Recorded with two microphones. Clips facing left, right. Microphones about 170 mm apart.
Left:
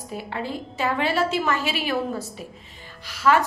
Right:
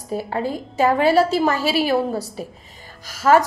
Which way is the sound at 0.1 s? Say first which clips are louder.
Right 7 dB; 40° right (ahead or behind).